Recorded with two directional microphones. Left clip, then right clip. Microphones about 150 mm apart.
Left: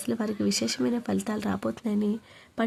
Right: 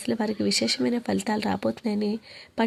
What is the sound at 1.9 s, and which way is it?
Speech, 15° right (ahead or behind).